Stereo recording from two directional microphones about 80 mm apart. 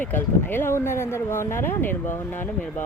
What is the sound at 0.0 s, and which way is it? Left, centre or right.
Speech, left.